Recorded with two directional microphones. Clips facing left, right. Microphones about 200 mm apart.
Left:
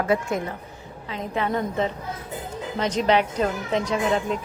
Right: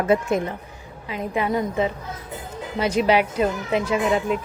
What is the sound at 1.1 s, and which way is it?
A woman's voice, 10° right (ahead or behind).